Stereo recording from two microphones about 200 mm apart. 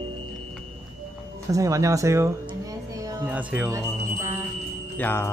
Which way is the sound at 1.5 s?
15° right (ahead or behind).